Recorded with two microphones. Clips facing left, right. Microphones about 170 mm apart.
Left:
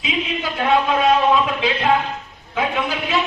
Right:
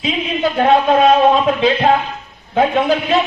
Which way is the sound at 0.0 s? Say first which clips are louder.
Right 6 dB; 40° right (ahead or behind).